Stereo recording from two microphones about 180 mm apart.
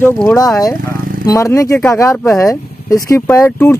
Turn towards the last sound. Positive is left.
turn(degrees=10)  # may be behind; listen again after turning